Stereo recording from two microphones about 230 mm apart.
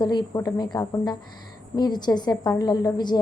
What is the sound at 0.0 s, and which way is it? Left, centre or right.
A woman's voice, centre.